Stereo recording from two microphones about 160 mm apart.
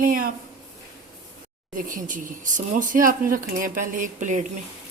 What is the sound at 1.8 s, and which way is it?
A woman's voice, 55° right (ahead or behind).